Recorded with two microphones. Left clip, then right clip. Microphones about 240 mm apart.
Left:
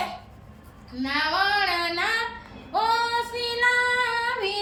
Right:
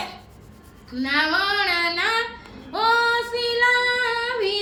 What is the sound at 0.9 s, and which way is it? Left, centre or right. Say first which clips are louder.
Child singing: right 3 dB; centre.